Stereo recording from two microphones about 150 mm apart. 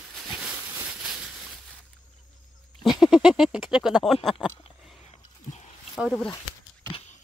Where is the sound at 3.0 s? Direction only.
5° right (ahead or behind).